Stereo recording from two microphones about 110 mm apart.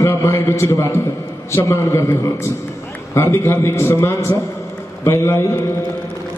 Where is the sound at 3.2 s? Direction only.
25° left (ahead or behind).